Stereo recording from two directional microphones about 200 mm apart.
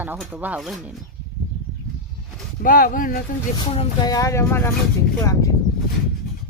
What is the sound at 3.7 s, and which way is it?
Speech, 25° left (ahead or behind).